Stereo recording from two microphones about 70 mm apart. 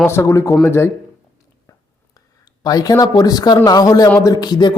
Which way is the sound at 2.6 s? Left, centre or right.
Left.